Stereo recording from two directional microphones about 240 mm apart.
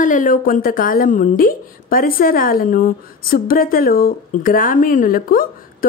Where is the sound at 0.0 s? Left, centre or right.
Left.